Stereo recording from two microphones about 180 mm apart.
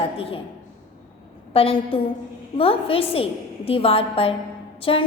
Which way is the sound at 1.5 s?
30° left (ahead or behind).